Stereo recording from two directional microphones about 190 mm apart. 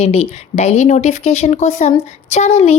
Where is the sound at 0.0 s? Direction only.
35° left (ahead or behind).